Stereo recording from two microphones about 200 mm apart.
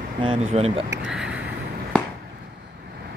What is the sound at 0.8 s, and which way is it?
Speech, 65° right (ahead or behind).